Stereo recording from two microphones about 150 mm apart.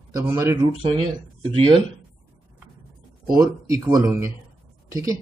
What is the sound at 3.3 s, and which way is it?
Speech, 20° right (ahead or behind).